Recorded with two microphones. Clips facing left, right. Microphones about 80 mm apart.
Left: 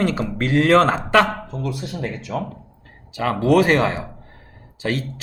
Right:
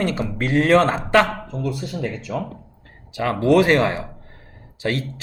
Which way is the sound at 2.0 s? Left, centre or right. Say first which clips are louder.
Even; left.